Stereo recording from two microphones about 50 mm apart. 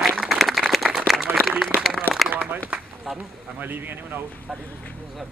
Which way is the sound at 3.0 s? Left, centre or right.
Centre.